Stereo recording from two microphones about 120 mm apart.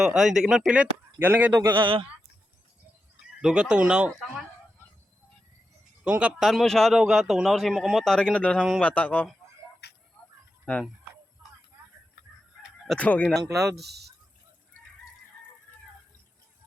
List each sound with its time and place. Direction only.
0.0 s a man's voice: 5° right (ahead or behind)
1.7 s a man's voice: 45° right (ahead or behind)
3.4 s speech: 10° right (ahead or behind)
6.1 s a man's voice: 10° right (ahead or behind); by 9.3 s 10° left (ahead or behind)
12.9 s a man's voice: 10° left (ahead or behind)